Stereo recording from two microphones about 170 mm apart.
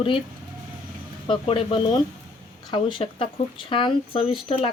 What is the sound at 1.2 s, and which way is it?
Speech, 30° left (ahead or behind).